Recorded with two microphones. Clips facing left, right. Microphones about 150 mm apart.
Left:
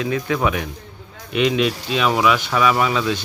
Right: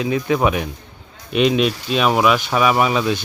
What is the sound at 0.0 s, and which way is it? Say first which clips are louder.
Speech: right 3 dB; 20° right (ahead or behind).